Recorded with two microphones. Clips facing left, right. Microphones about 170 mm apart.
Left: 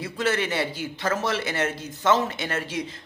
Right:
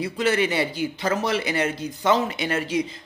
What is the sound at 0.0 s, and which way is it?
A man's voice, 15° right (ahead or behind).